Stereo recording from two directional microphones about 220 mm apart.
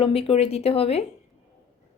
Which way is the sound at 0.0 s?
25° left (ahead or behind).